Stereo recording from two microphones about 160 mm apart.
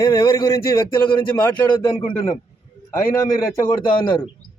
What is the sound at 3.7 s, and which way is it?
Speech, 30° left (ahead or behind).